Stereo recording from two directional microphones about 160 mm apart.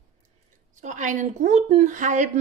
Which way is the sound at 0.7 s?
50° right (ahead or behind).